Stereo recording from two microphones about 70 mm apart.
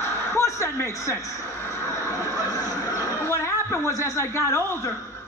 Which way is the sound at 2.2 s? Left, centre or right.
Left.